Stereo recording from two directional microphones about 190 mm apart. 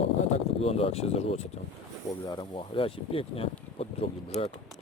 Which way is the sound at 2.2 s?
25° left (ahead or behind).